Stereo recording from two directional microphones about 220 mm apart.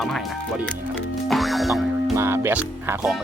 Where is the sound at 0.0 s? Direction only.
Centre (ahead or behind).